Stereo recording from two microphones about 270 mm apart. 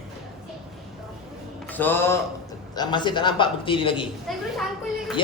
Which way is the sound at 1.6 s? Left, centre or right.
Centre.